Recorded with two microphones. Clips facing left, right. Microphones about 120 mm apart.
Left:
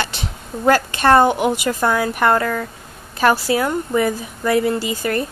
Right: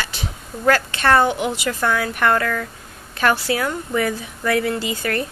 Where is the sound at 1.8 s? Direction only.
15° left (ahead or behind).